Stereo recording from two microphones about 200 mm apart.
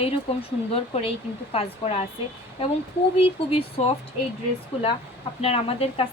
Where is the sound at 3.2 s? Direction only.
25° left (ahead or behind).